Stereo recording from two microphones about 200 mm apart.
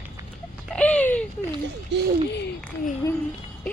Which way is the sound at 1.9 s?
60° right (ahead or behind).